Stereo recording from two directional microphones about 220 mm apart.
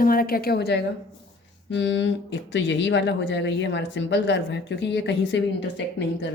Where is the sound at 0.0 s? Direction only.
40° left (ahead or behind).